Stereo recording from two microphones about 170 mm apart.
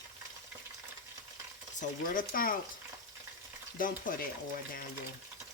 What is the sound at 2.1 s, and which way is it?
Speech, 55° left (ahead or behind).